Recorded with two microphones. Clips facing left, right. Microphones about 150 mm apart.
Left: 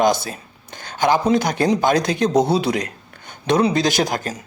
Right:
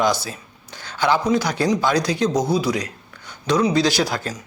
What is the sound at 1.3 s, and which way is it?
Speech, 50° left (ahead or behind).